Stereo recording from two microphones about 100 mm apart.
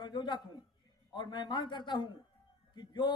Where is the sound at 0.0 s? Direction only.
50° left (ahead or behind).